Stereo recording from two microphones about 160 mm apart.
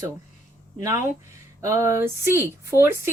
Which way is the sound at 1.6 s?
20° right (ahead or behind).